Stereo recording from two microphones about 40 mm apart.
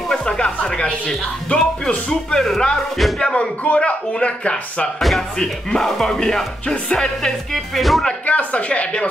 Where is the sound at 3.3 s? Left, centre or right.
Left.